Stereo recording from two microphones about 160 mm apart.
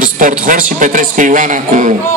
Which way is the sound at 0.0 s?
55° right (ahead or behind).